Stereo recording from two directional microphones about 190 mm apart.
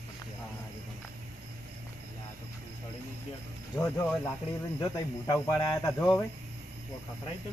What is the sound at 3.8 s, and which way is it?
Speech, 10° left (ahead or behind).